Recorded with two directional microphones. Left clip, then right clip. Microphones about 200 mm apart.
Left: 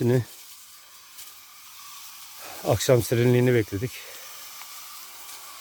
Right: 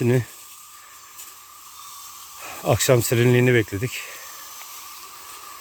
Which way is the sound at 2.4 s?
10° left (ahead or behind).